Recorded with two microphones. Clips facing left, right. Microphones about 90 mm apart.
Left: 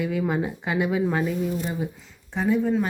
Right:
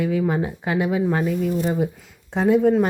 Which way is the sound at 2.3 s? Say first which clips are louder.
Right 6 dB; 70° right (ahead or behind).